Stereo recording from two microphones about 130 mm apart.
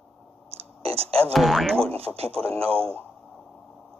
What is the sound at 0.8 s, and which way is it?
Speech, 50° right (ahead or behind).